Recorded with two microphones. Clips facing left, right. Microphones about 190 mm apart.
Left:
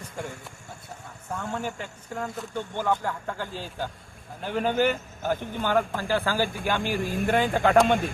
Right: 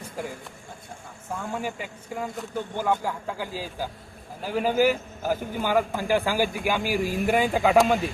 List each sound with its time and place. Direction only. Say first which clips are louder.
0.2 s a man's voice: right 2 dB; 5° right (ahead or behind)